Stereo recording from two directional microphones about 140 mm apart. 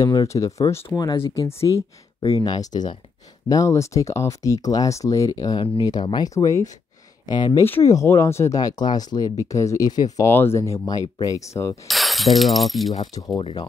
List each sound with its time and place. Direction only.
0.0 s speech: 25° left (ahead or behind)
0.9 s speech: 30° left (ahead or behind)
7.6 s speech: 20° left (ahead or behind)
11.9 s speech: centre (ahead or behind)
13.0 s speech: 25° left (ahead or behind)
13.4 s speech: 40° left (ahead or behind)